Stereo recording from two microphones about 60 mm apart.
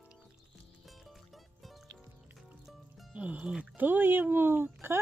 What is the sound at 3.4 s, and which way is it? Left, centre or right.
Speech, centre.